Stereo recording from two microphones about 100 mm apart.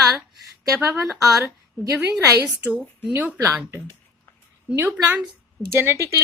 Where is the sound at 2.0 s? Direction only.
15° right (ahead or behind).